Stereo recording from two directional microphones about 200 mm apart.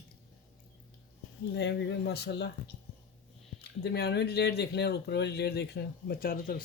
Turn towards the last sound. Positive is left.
turn(degrees=45)  # may be behind; listen again after turning